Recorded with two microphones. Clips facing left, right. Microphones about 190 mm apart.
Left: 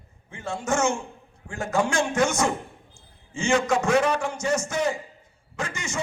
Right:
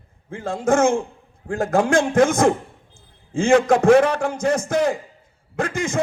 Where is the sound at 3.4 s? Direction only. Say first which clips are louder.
Right 7 dB; 55° right (ahead or behind).